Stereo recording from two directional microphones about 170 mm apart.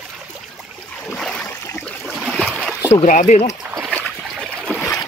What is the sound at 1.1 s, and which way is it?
Boat, 5° left (ahead or behind).